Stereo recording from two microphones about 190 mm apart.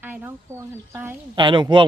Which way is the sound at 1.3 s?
25° right (ahead or behind).